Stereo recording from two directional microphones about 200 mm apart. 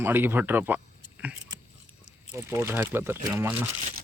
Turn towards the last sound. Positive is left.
turn(degrees=-10)  # may be behind; listen again after turning